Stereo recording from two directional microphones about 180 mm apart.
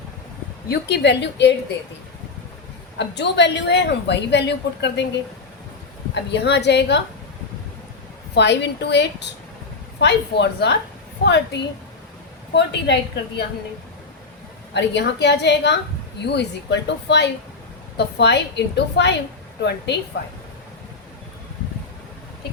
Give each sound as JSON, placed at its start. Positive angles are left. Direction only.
{"t": 0.7, "sound": "a woman's voice", "side_deg": 75}
{"t": 3.0, "sound": "a woman's voice", "side_deg": 75}
{"t": 6.1, "sound": "a woman's voice", "side_deg": 70}
{"t": 8.4, "sound": "a woman's voice", "side_deg": 70}
{"t": 12.5, "sound": "a woman's voice", "side_deg": 70}
{"t": 14.7, "sound": "a woman's voice", "side_deg": 70}